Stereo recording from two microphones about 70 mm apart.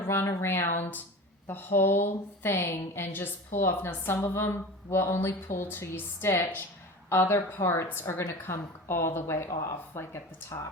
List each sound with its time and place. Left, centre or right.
0.0 s a woman's voice: left